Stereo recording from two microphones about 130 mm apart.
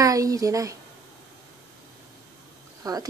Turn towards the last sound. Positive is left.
turn(degrees=-30)  # may be behind; listen again after turning